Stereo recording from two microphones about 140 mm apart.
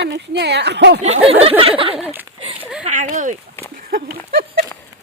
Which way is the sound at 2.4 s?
40° right (ahead or behind).